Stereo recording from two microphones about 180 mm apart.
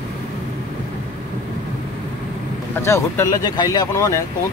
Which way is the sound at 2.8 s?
15° left (ahead or behind).